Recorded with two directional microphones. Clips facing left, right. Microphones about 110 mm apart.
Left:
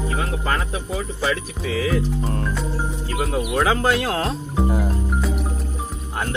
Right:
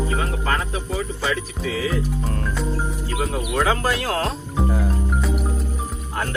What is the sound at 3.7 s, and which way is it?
Speech, 25° left (ahead or behind).